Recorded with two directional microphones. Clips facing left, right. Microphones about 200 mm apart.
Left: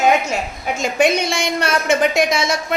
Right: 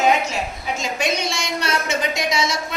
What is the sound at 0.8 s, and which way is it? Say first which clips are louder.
A woman's voice: left 8 dB; 50° left (ahead or behind).